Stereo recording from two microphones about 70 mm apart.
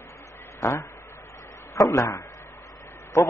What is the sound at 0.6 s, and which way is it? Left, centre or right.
A man's voice, left.